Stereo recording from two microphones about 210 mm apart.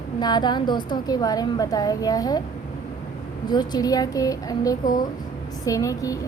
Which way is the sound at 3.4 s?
20° left (ahead or behind).